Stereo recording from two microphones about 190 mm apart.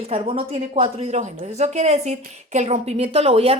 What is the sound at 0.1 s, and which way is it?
A woman's voice, 30° right (ahead or behind).